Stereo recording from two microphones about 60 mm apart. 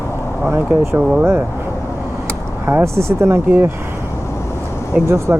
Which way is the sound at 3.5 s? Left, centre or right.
Right.